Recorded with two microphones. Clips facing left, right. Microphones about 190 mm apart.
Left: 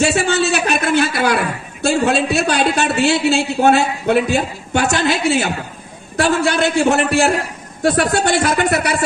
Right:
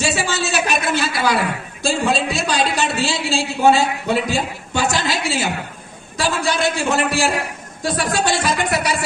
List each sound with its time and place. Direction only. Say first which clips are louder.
0.0 s a man's voice: left 6 dB; 60° left (ahead or behind)